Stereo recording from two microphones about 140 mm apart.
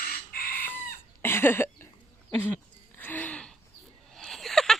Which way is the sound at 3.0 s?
10° left (ahead or behind).